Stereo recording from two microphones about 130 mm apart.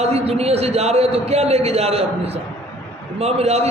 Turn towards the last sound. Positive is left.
turn(degrees=-55)  # may be behind; listen again after turning